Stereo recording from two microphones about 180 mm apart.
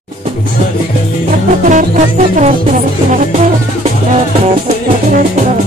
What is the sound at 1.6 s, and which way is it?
Music, 45° right (ahead or behind).